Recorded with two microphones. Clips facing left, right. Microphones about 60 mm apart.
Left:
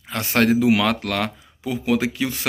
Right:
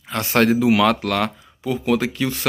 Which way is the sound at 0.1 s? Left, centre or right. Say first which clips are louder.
Right 1 dB; centre.